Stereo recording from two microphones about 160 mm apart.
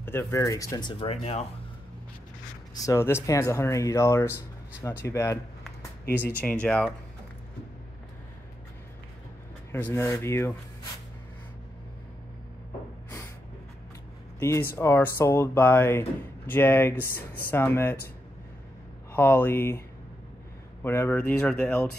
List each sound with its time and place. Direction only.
0.0 s speech: 15° left (ahead or behind); by 1.4 s 40° left (ahead or behind)
2.7 s speech: 20° left (ahead or behind)
6.4 s speech: 5° left (ahead or behind)
9.7 s speech: 15° left (ahead or behind)
14.8 s speech: 15° left (ahead or behind)
19.1 s speech: 15° left (ahead or behind)
20.8 s speech: 15° left (ahead or behind)